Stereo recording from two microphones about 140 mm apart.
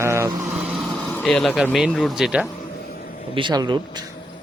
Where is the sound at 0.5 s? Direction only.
5° right (ahead or behind).